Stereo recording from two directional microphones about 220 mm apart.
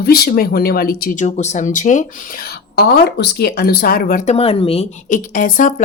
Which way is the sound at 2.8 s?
45° left (ahead or behind).